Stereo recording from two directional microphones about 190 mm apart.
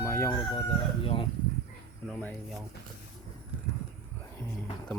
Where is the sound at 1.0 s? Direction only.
30° left (ahead or behind).